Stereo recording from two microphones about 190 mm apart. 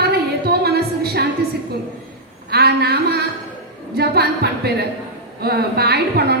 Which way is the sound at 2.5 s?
55° right (ahead or behind).